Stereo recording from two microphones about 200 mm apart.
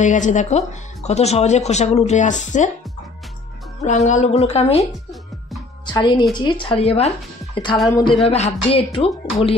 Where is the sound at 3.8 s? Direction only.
35° left (ahead or behind).